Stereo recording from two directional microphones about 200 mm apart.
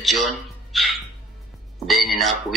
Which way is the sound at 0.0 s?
Centre (ahead or behind).